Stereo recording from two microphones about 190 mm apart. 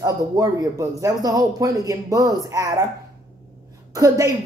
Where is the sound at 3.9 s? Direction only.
15° right (ahead or behind).